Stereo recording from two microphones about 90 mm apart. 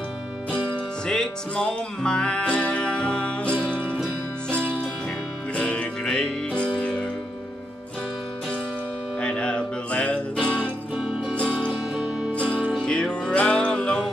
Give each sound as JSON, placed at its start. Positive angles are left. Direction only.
{"t": 1.0, "sound": "music", "side_deg": 10}
{"t": 3.7, "sound": "music", "side_deg": -20}
{"t": 5.6, "sound": "music", "side_deg": 10}
{"t": 9.2, "sound": "music", "side_deg": 10}
{"t": 11.9, "sound": "music", "side_deg": -5}
{"t": 12.4, "sound": "music", "side_deg": -20}
{"t": 12.7, "sound": "music", "side_deg": 10}